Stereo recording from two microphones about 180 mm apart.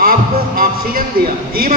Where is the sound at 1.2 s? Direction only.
55° right (ahead or behind).